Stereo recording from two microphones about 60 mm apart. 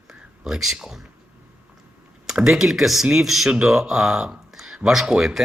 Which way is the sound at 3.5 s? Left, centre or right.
Right.